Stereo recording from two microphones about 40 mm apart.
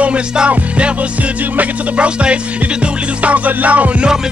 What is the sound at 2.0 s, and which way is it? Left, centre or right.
Music, right.